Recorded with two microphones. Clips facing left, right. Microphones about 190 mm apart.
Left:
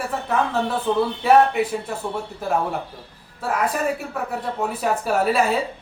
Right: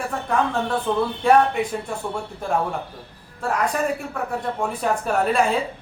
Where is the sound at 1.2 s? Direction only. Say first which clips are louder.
Left 1 dB; 5° left (ahead or behind).